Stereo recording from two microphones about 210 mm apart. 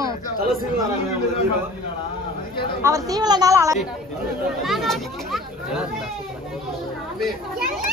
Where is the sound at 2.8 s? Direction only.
15° right (ahead or behind).